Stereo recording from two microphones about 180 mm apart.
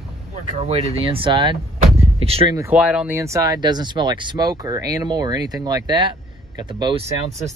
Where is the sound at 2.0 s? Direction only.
30° right (ahead or behind).